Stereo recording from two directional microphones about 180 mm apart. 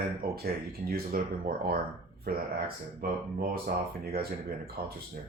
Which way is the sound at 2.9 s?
55° right (ahead or behind).